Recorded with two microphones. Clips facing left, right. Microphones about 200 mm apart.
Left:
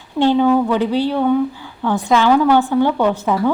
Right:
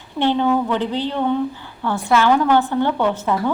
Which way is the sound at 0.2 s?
10° left (ahead or behind).